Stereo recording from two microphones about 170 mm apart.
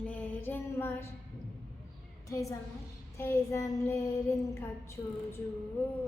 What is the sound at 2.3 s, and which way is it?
A woman's voice, 20° left (ahead or behind).